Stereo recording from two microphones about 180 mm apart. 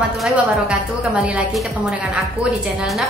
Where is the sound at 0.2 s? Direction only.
5° right (ahead or behind).